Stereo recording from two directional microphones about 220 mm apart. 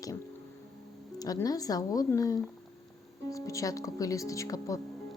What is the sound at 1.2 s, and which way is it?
A woman's voice, 15° left (ahead or behind).